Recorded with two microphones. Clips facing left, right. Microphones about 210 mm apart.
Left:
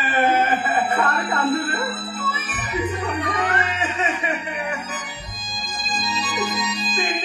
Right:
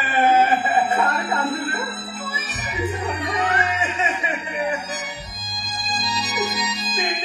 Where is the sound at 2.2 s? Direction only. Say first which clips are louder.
Left 2 dB; 25° right (ahead or behind).